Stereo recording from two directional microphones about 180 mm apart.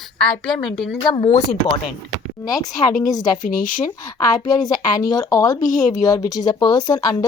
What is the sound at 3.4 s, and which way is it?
Speech, 50° left (ahead or behind).